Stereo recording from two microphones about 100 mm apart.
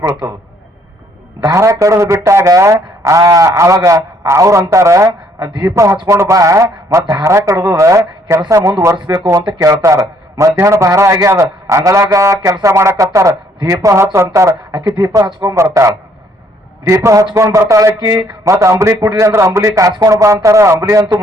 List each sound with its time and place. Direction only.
1.5 s a man's voice: 30° right (ahead or behind)
14.8 s speech: 40° right (ahead or behind)
15.4 s a man's voice: 35° right (ahead or behind)